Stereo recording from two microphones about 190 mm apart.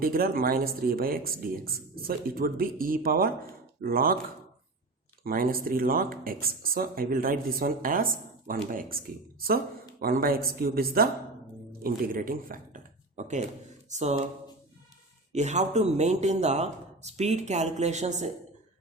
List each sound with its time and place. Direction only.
0.0 s speech: 50° right (ahead or behind)
5.2 s speech: 50° right (ahead or behind)
10.0 s a man's voice: 50° right (ahead or behind)
15.3 s a man's voice: 35° right (ahead or behind)